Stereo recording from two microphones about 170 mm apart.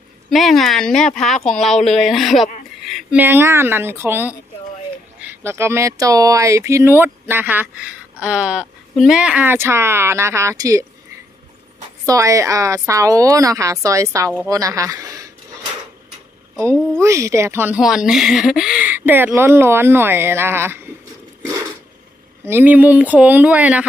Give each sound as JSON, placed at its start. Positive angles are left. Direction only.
{"t": 0.3, "sound": "speech", "side_deg": 0}
{"t": 12.0, "sound": "a woman's voice", "side_deg": -20}
{"t": 17.0, "sound": "speech", "side_deg": -15}
{"t": 22.4, "sound": "speech", "side_deg": -10}